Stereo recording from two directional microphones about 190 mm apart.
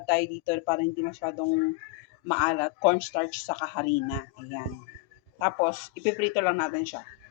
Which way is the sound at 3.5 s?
20° left (ahead or behind).